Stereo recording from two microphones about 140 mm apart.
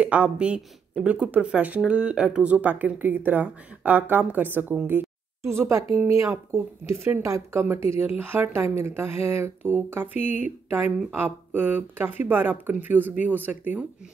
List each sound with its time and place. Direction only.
0.0 s speech: 10° right (ahead or behind)